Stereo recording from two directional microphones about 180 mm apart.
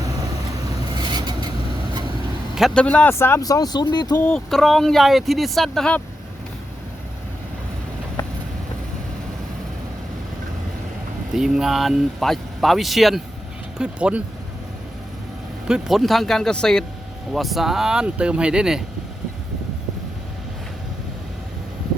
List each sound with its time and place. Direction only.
0.9 s vehicle: 25° right (ahead or behind)
2.6 s speech: centre (ahead or behind); by 4.1 s 25° left (ahead or behind)
4.1 s speech: 5° left (ahead or behind)
11.3 s speech: centre (ahead or behind)
15.6 s speech: centre (ahead or behind)